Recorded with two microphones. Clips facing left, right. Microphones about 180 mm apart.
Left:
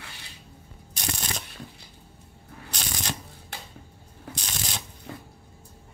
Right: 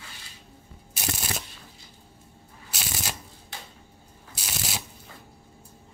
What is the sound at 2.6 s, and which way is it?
Shuffling cards, 5° right (ahead or behind).